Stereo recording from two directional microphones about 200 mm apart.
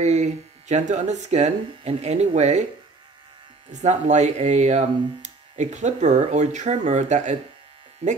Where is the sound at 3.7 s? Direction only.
35° right (ahead or behind).